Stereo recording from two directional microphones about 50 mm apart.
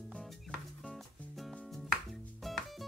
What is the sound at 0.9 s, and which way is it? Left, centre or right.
Music, centre.